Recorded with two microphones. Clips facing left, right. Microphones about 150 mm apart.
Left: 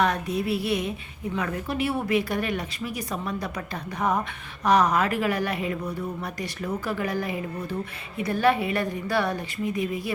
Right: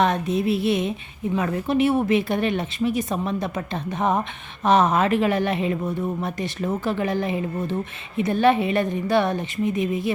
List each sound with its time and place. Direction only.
0.0 s speech: 25° right (ahead or behind)
4.6 s speech: 25° right (ahead or behind)